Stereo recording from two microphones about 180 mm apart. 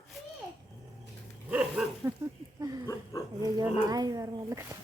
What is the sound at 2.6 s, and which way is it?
Speech, 20° right (ahead or behind).